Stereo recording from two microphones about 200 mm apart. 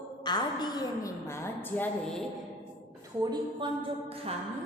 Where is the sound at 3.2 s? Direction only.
20° right (ahead or behind).